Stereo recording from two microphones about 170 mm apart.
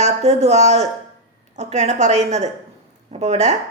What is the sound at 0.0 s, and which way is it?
A woman's voice, 40° right (ahead or behind).